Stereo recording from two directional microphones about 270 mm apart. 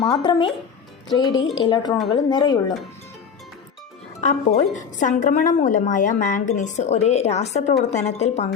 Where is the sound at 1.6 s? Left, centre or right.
Centre.